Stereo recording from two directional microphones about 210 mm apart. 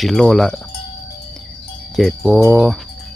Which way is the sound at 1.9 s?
Centre (ahead or behind).